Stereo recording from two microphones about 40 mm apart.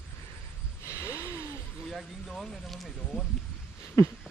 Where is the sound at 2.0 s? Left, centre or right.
Centre.